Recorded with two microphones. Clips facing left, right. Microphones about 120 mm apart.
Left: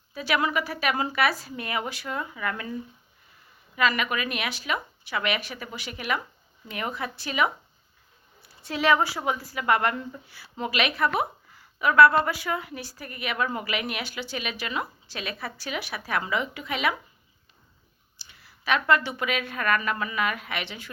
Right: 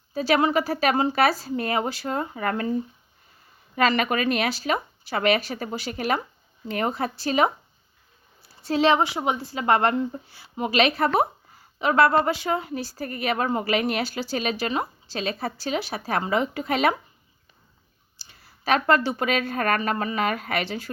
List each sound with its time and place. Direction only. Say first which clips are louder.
0.1 s a woman's voice: right 5 dB; 30° right (ahead or behind)
18.2 s a woman's voice: right 4 dB; 35° right (ahead or behind)